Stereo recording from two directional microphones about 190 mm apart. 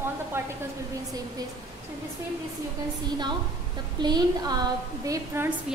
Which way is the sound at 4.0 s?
20° right (ahead or behind).